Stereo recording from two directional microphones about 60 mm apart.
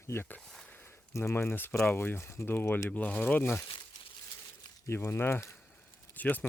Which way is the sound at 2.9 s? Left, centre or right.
Left.